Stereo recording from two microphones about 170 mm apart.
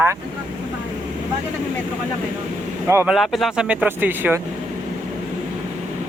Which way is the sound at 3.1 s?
Centre (ahead or behind).